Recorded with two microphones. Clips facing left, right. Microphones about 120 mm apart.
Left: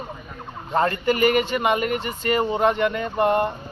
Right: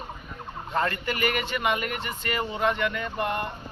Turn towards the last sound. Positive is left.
turn(degrees=35)  # may be behind; listen again after turning